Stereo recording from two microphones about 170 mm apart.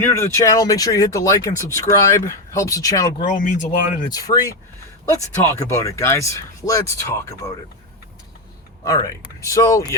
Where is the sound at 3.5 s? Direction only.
50° left (ahead or behind).